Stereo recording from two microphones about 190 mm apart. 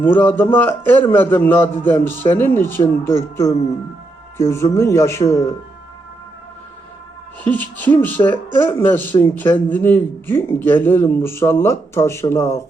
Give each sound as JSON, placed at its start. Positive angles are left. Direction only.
{"t": 0.0, "sound": "speech", "side_deg": 10}
{"t": 7.5, "sound": "speech", "side_deg": 10}